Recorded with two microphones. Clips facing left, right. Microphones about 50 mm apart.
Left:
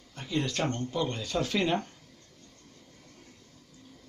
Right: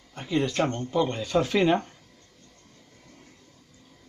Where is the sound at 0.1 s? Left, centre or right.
Centre.